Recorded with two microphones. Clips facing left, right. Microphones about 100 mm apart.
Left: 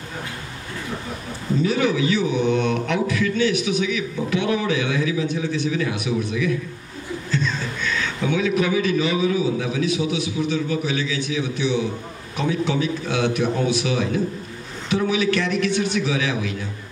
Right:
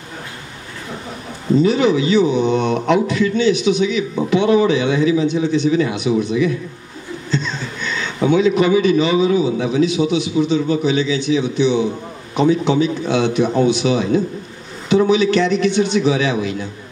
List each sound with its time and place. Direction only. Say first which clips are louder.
1.7 s a man's voice: right 5 dB; 20° right (ahead or behind)